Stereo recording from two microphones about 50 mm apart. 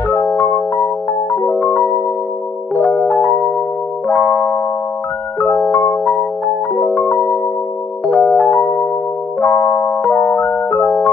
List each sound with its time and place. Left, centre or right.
0.1 s music: left
1.3 s music: left
5.7 s music: left
6.8 s music: left
9.5 s electric piano: left
10.0 s music: left